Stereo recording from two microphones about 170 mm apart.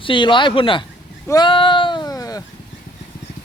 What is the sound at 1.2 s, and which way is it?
Sheep, 25° left (ahead or behind).